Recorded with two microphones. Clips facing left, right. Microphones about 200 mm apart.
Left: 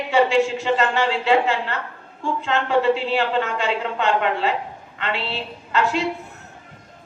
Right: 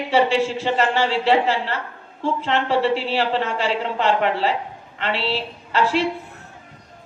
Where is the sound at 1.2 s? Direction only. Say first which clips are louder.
Even; 30° right (ahead or behind).